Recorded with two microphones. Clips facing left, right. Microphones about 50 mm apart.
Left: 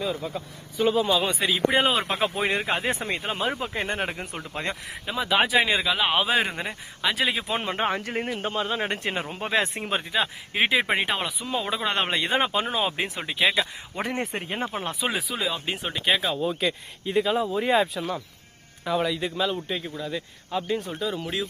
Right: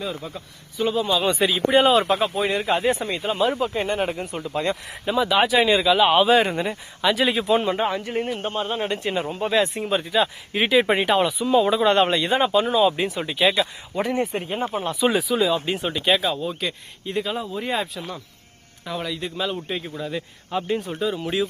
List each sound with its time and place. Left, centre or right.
0.0 s speech: centre
2.3 s speech: left
5.1 s speech: centre
6.0 s speech: centre
7.4 s speech: left
7.8 s speech: left
8.5 s a man's voice: left
8.9 s speech: left
10.1 s speech: centre
12.1 s speech: left
13.2 s speech: centre
14.0 s speech: left
15.0 s speech: centre
20.7 s speech: centre